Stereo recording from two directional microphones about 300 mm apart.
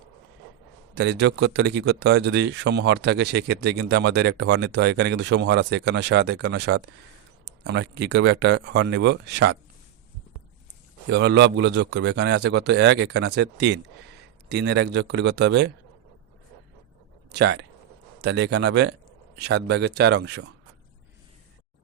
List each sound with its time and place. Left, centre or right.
0.9 s speech: right
11.0 s speech: right
17.3 s speech: right